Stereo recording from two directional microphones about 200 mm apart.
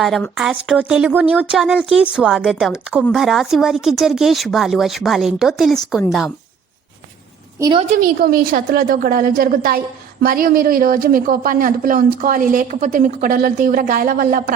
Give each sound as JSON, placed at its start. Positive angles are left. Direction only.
{"t": 0.0, "sound": "speech", "side_deg": 0}
{"t": 7.6, "sound": "a woman's voice", "side_deg": -25}
{"t": 7.9, "sound": "a woman's voice", "side_deg": -45}